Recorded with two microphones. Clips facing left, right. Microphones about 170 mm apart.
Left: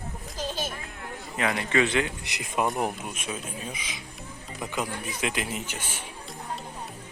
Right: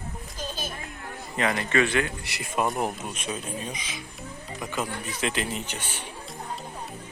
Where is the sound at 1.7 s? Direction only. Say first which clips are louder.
Left 1 dB; 20° left (ahead or behind).